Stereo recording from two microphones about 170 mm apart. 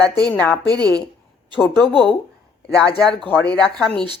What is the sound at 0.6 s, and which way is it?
Speech, 25° right (ahead or behind).